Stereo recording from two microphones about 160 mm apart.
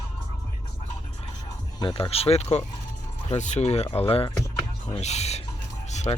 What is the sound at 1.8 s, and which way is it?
Speech, 35° left (ahead or behind).